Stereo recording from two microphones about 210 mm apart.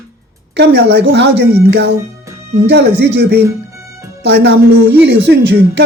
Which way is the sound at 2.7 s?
55° right (ahead or behind).